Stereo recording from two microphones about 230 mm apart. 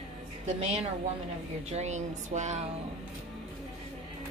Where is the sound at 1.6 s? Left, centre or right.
Right.